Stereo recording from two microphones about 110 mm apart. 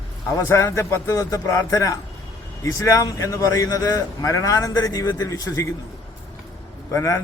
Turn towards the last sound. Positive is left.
turn(degrees=25)  # may be behind; listen again after turning